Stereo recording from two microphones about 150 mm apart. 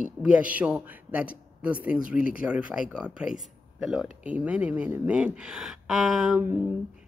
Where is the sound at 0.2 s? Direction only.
5° right (ahead or behind).